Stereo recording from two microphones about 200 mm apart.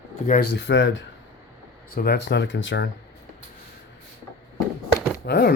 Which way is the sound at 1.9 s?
55° left (ahead or behind).